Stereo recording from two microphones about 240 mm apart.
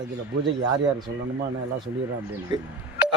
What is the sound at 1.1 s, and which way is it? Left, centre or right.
Speech, right.